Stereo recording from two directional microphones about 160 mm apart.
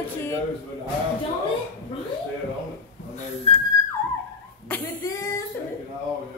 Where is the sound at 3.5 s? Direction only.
35° left (ahead or behind).